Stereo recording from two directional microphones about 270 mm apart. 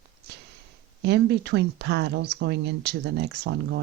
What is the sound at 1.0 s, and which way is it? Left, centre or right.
Speech, right.